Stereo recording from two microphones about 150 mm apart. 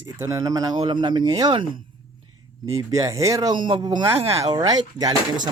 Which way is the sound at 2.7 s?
20° right (ahead or behind).